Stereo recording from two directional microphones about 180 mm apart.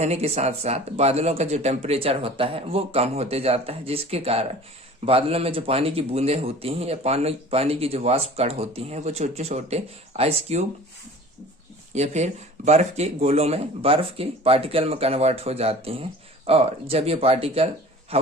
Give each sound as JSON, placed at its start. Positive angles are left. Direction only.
{"t": 0.0, "sound": "speech", "side_deg": -35}
{"t": 11.9, "sound": "a man's voice", "side_deg": -40}